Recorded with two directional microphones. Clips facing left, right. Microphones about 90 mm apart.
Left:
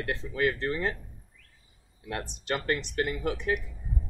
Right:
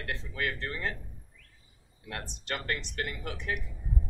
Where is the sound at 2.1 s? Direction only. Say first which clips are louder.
Left 5 dB; 20° left (ahead or behind).